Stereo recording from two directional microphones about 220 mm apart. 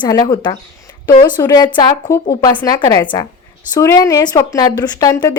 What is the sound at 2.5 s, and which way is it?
Speech, 5° left (ahead or behind).